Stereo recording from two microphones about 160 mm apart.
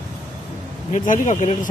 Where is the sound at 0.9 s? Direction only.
55° left (ahead or behind).